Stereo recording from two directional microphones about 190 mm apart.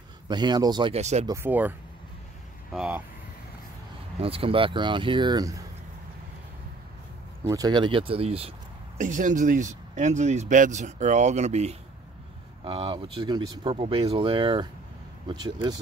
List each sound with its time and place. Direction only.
0.3 s speech: 25° right (ahead or behind)
0.9 s speech: 35° right (ahead or behind)
1.2 s speech: 15° right (ahead or behind)
4.2 s speech: 30° right (ahead or behind)
7.4 s speech: 20° right (ahead or behind)